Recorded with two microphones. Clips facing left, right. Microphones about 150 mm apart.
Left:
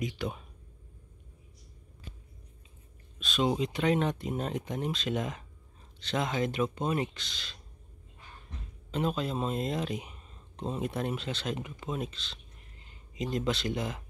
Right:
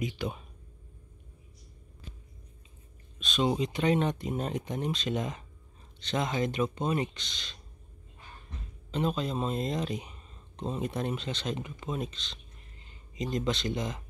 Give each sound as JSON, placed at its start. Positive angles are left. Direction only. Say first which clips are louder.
{"t": 0.0, "sound": "speech", "louder": "right 1 dB", "side_deg": 0}
{"t": 3.2, "sound": "speech", "louder": "even", "side_deg": 5}
{"t": 8.9, "sound": "speech", "louder": "right 1 dB", "side_deg": 5}